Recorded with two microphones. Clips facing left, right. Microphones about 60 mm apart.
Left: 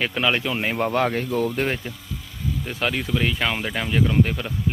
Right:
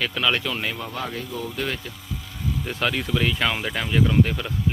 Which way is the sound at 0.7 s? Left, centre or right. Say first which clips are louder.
Left 9 dB; left.